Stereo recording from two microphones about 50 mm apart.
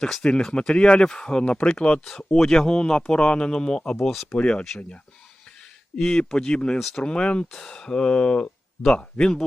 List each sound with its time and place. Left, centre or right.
0.0 s speech: centre
4.4 s speech: centre
6.1 s speech: centre